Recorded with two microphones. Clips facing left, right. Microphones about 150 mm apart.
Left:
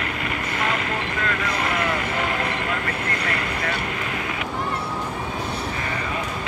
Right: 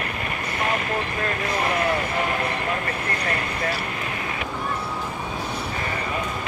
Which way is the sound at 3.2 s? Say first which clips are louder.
Even; 35° right (ahead or behind).